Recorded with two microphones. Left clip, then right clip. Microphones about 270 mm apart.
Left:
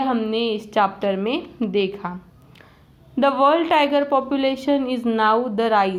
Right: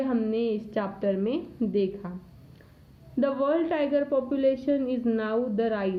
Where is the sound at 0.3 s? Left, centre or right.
Centre.